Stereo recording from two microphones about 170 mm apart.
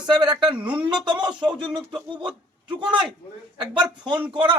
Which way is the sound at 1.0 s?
25° right (ahead or behind).